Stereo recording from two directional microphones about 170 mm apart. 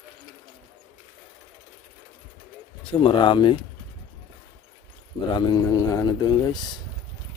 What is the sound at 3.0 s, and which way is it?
Speech, 30° left (ahead or behind).